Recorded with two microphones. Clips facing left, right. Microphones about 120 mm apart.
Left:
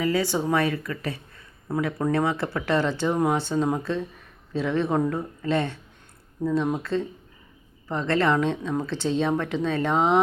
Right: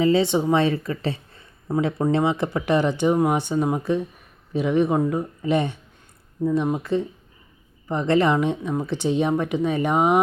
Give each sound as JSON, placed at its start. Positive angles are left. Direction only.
{"t": 0.0, "sound": "speech", "side_deg": -25}